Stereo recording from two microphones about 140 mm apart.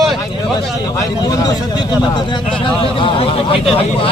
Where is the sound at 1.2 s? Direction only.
30° left (ahead or behind).